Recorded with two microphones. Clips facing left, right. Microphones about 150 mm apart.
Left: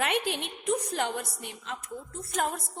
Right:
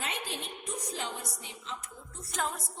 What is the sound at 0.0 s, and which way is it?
A woman's voice, 70° left (ahead or behind).